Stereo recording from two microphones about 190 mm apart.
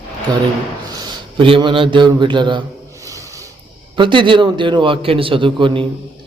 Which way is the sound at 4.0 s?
25° right (ahead or behind).